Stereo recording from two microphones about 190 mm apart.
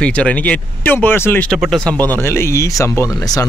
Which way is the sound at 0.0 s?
5° left (ahead or behind).